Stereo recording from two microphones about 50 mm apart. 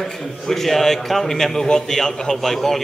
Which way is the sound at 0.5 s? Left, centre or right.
Centre.